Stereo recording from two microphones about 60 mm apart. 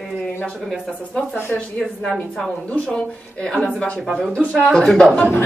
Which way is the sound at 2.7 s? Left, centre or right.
Centre.